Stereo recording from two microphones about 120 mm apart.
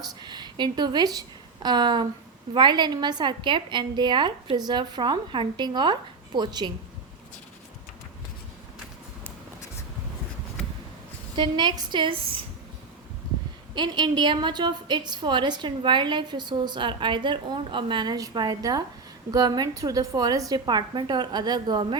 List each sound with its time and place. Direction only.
0.0 s a woman's voice: 40° right (ahead or behind)
11.3 s a woman's voice: 40° right (ahead or behind)
13.7 s a woman's voice: 35° right (ahead or behind)